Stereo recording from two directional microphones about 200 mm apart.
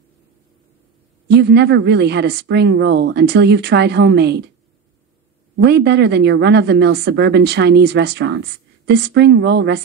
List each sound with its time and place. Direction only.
1.3 s speech: 55° right (ahead or behind)
5.6 s speech: 55° right (ahead or behind)